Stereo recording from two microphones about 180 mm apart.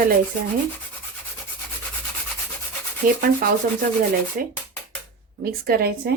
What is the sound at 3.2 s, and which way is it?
A woman's voice, 50° right (ahead or behind).